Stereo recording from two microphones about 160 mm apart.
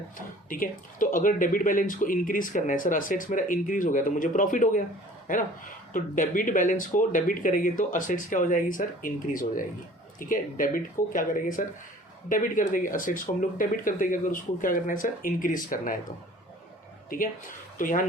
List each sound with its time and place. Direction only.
0.5 s speech: 60° left (ahead or behind)
5.9 s speech: 55° left (ahead or behind)
17.7 s speech: 55° left (ahead or behind)